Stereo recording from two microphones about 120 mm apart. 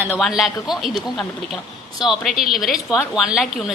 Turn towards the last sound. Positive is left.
turn(degrees=-5)  # may be behind; listen again after turning